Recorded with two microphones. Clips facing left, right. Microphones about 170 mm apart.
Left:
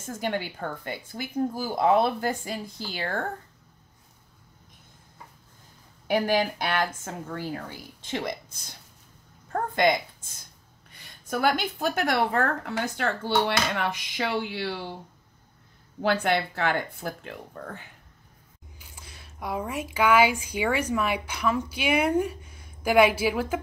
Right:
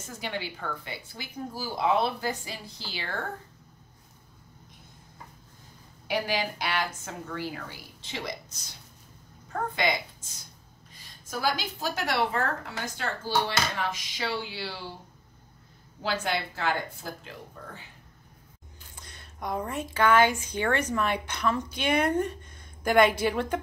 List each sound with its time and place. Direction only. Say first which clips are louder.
0.0 s speech: left 5 dB; 50° left (ahead or behind)
6.0 s a woman's voice: left 5 dB; 50° left (ahead or behind)
10.9 s a woman's voice: left 7 dB; 65° left (ahead or behind)
16.0 s a woman's voice: left 6 dB; 60° left (ahead or behind)
18.8 s speech: left 1 dB; 5° left (ahead or behind)